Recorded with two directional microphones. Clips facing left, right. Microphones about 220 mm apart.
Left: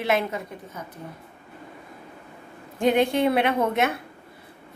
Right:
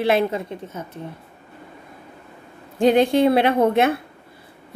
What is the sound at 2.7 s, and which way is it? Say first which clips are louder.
A woman's voice: right 5 dB; 35° right (ahead or behind).